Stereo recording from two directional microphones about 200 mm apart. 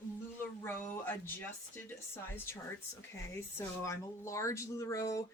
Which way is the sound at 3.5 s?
15° left (ahead or behind).